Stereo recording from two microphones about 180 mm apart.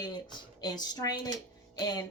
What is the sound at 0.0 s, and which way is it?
A woman's voice, 20° left (ahead or behind).